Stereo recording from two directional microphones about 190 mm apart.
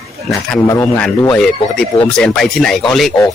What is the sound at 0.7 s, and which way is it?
Speech, 15° left (ahead or behind).